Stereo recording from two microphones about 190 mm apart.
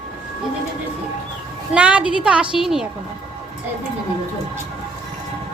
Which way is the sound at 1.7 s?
5° right (ahead or behind).